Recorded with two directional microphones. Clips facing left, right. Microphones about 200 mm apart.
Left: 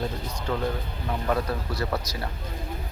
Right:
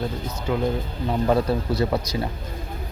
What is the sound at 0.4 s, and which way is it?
Speech, 10° right (ahead or behind).